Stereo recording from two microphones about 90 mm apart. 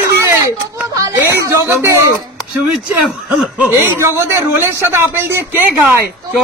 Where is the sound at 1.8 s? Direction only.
35° right (ahead or behind).